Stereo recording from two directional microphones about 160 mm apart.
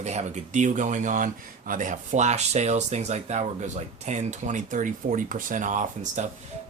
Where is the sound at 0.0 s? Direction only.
45° right (ahead or behind).